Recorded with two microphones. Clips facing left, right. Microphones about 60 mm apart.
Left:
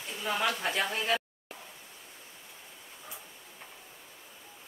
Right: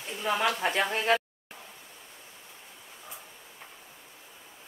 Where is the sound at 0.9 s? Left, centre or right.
Right.